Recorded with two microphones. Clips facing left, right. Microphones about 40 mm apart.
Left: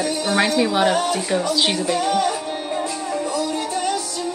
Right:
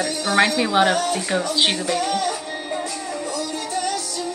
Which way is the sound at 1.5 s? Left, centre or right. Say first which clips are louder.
Even; centre.